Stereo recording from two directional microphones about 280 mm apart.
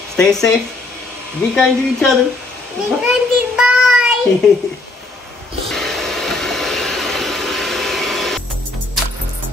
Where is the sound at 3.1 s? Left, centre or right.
Centre.